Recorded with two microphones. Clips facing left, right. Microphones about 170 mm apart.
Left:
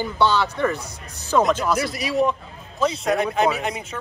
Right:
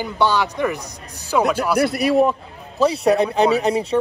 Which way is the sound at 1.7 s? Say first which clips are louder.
Right 6 dB; 60° right (ahead or behind).